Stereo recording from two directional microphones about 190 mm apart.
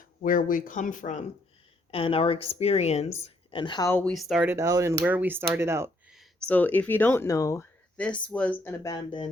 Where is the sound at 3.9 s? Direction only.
5° left (ahead or behind).